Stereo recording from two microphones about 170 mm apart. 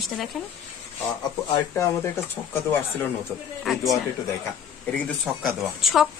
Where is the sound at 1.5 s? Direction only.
15° left (ahead or behind).